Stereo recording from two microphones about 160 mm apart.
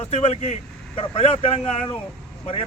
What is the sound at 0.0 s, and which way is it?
A man's voice, 40° left (ahead or behind).